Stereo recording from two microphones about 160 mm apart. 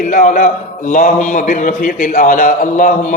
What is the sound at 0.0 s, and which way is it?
A man's voice, 55° left (ahead or behind).